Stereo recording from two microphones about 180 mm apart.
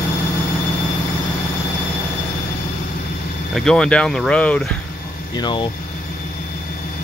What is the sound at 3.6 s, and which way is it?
Speech, 5° left (ahead or behind).